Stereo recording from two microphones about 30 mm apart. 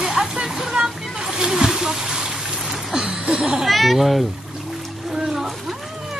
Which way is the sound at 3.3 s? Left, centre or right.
Centre.